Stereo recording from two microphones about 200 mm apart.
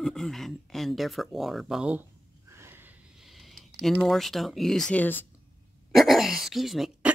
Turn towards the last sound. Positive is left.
turn(degrees=0)  # may be behind; listen again after turning